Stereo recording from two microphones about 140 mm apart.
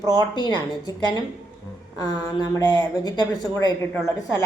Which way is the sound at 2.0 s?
30° left (ahead or behind).